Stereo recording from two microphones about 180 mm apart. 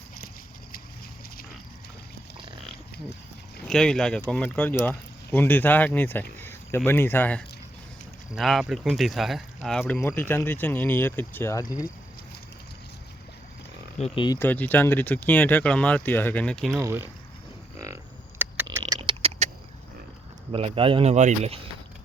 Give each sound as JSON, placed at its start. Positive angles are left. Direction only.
{"t": 3.7, "sound": "speech", "side_deg": 5}
{"t": 14.0, "sound": "speech", "side_deg": 30}
{"t": 14.3, "sound": "speech", "side_deg": 10}
{"t": 16.8, "sound": "speech", "side_deg": -15}
{"t": 17.7, "sound": "a sound", "side_deg": -15}
{"t": 18.9, "sound": "a sound", "side_deg": -35}
{"t": 20.5, "sound": "speech", "side_deg": -30}